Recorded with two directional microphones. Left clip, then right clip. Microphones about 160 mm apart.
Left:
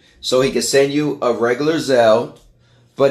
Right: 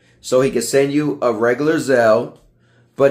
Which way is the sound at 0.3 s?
10° right (ahead or behind).